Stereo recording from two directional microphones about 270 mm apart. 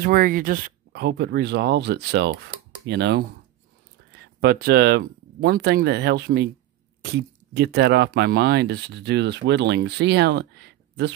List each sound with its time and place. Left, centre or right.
0.0 s speech: right
4.4 s speech: right